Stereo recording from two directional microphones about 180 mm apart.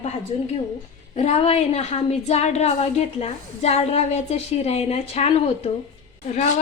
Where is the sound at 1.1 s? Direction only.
35° left (ahead or behind).